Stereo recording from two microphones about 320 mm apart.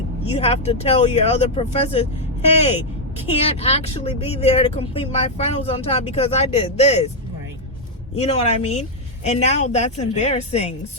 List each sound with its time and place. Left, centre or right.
0.3 s speech: centre
3.2 s speech: centre
8.2 s speech: centre